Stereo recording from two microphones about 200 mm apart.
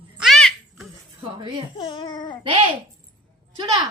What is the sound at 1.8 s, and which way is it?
Speech, 25° left (ahead or behind).